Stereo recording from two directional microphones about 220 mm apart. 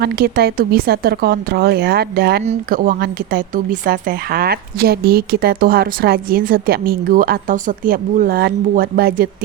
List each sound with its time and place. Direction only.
0.0 s speech: 45° right (ahead or behind)